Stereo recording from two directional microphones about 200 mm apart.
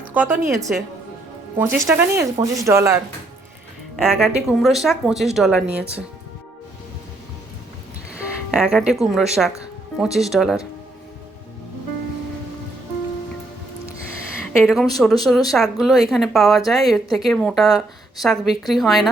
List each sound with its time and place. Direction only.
0.1 s speech: 10° right (ahead or behind)
3.9 s speech: centre (ahead or behind)
8.4 s speech: centre (ahead or behind)
14.6 s speech: centre (ahead or behind)